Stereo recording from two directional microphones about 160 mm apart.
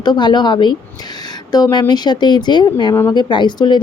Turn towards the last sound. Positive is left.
turn(degrees=30)  # may be behind; listen again after turning